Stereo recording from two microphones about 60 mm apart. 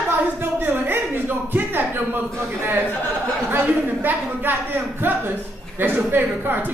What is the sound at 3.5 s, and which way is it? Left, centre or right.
A man's voice, right.